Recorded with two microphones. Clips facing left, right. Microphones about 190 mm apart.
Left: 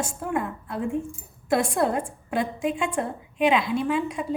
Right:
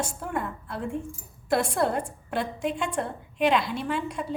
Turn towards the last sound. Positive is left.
turn(degrees=5)  # may be behind; listen again after turning